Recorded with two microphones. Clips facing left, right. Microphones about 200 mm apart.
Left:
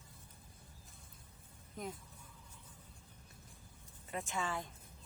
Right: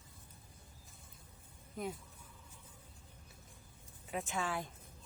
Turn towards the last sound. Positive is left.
turn(degrees=-5)  # may be behind; listen again after turning